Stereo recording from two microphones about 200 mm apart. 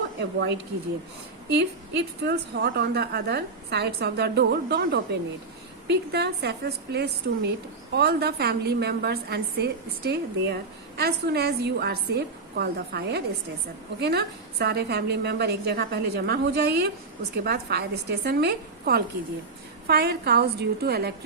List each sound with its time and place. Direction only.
0.2 s a woman's voice: 55° right (ahead or behind)